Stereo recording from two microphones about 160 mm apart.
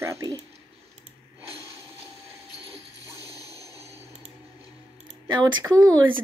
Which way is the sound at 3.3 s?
25° left (ahead or behind).